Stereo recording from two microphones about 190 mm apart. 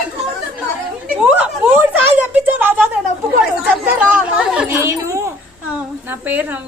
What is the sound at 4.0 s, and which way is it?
Speech, 5° right (ahead or behind).